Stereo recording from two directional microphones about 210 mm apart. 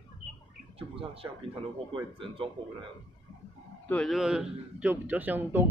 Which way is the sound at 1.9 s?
25° right (ahead or behind).